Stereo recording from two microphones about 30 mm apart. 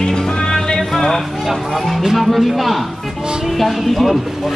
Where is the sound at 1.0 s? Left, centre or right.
Centre.